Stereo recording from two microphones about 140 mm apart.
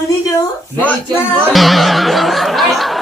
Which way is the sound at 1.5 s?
Centre (ahead or behind).